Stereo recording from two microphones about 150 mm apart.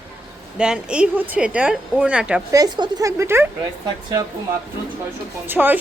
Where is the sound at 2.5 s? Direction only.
25° right (ahead or behind).